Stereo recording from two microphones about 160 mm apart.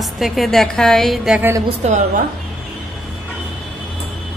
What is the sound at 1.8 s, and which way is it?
Speech, 45° right (ahead or behind).